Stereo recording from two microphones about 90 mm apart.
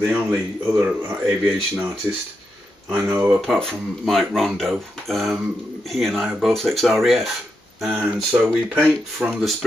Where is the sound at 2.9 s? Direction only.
25° right (ahead or behind).